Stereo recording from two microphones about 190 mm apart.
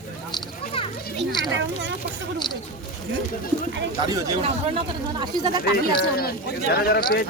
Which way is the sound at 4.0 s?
20° right (ahead or behind).